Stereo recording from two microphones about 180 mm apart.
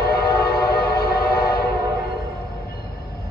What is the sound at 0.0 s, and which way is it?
Train, 60° left (ahead or behind).